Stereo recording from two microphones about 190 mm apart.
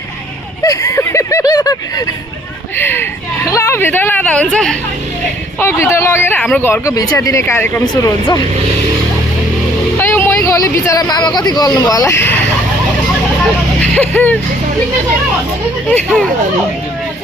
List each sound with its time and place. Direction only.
0.6 s a sound: 15° left (ahead or behind)
5.5 s speech: 15° left (ahead or behind)
10.0 s a man's voice: 10° left (ahead or behind)
13.9 s speech: 10° left (ahead or behind)
15.9 s speech: 5° left (ahead or behind)